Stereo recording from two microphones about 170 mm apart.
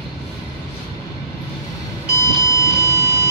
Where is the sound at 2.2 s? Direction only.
20° left (ahead or behind).